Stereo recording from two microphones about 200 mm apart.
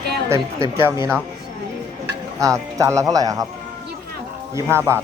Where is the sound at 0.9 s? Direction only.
10° right (ahead or behind).